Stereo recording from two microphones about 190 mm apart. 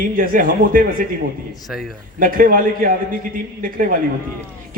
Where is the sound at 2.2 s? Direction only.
50° right (ahead or behind).